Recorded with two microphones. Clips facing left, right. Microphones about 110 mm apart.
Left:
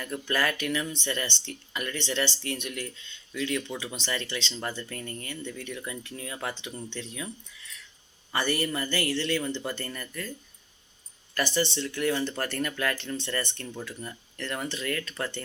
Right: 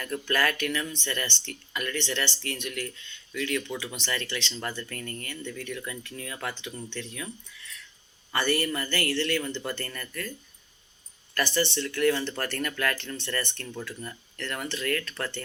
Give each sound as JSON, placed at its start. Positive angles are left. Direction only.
{"t": 0.0, "sound": "speech", "side_deg": 20}
{"t": 11.3, "sound": "speech", "side_deg": 20}